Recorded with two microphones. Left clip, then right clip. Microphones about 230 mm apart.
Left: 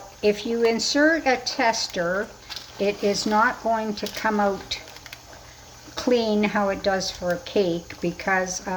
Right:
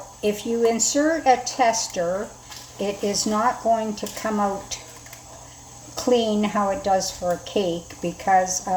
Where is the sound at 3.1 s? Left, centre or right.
Left.